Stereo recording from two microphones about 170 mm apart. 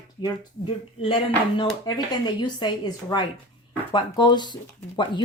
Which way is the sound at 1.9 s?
25° left (ahead or behind).